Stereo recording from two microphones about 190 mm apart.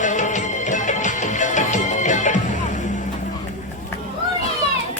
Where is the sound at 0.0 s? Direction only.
40° left (ahead or behind).